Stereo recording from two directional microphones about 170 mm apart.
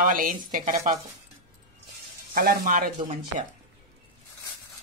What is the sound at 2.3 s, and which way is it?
Speech, 60° right (ahead or behind).